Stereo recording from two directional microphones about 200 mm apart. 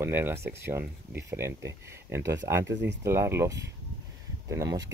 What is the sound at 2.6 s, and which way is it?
Speech, 60° right (ahead or behind).